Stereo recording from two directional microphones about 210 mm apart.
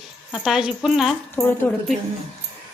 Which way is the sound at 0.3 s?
Centre (ahead or behind).